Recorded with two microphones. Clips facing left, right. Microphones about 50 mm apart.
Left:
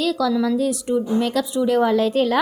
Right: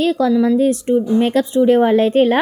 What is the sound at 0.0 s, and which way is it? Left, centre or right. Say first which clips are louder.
A woman's voice: right 5 dB; right.